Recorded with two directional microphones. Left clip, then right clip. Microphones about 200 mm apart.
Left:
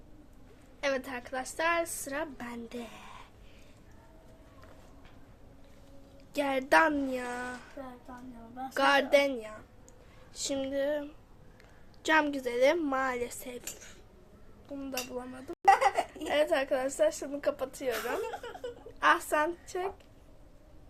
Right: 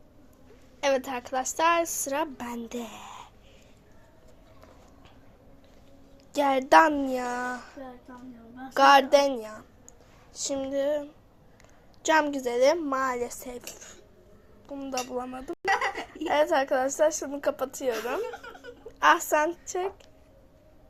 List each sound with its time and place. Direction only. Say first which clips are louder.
0.8 s a woman's voice: right 6 dB; 20° right (ahead or behind)
6.3 s a woman's voice: right 6 dB; 15° right (ahead or behind)
8.7 s a woman's voice: right 7 dB; 15° right (ahead or behind)
10.3 s a woman's voice: right 3 dB; centre (ahead or behind); by 15.5 s 15° right (ahead or behind)
15.7 s a sound: left 2 dB; 60° left (ahead or behind)
16.2 s a woman's voice: right 6 dB; 15° right (ahead or behind)
18.3 s a sound: even; 55° left (ahead or behind)
18.9 s a woman's voice: right 5 dB; 20° right (ahead or behind)